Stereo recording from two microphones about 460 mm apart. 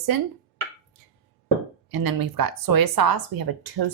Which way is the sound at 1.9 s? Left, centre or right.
Right.